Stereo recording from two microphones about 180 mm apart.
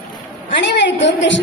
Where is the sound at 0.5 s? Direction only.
75° left (ahead or behind); by 1.4 s 90° left.